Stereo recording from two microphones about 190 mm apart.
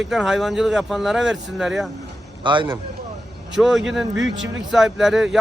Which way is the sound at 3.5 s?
Centre (ahead or behind).